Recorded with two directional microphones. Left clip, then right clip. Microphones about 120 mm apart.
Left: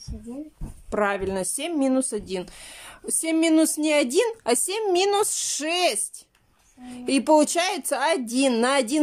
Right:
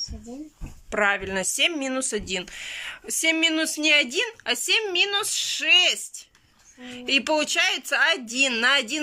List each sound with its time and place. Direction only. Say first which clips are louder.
0.9 s speech: right 1 dB; 35° left (ahead or behind)